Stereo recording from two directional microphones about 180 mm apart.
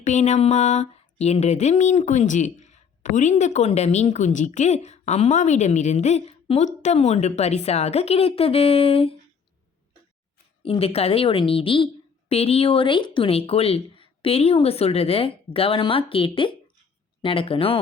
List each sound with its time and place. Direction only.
0.0 s speech: 40° left (ahead or behind)
10.6 s speech: 30° left (ahead or behind)